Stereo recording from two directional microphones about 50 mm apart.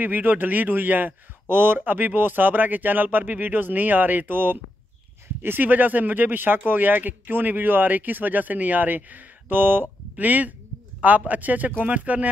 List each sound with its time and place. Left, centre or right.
0.0 s speech: right